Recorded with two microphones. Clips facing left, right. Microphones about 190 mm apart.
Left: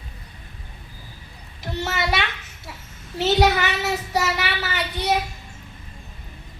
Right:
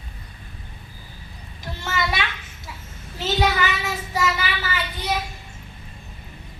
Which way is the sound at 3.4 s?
65° left (ahead or behind).